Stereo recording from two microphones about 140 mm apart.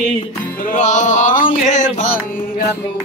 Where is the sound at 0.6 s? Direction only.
60° left (ahead or behind).